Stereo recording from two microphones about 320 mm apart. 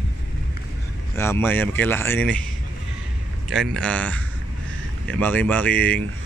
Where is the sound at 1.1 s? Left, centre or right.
Centre.